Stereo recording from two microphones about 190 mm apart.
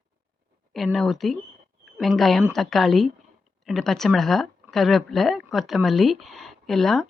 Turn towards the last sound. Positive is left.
turn(degrees=0)  # may be behind; listen again after turning